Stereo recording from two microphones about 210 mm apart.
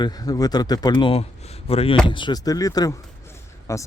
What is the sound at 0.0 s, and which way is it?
Speech, 15° left (ahead or behind).